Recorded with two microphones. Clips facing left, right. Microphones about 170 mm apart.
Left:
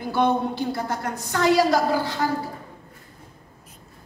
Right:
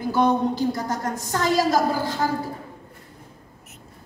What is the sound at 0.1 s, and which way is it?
A woman's voice, 40° right (ahead or behind).